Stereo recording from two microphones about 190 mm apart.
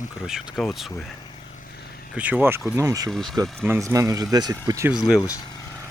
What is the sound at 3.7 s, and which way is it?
Speech, 15° right (ahead or behind).